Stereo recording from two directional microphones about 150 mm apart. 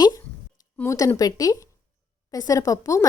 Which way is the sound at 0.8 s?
20° left (ahead or behind).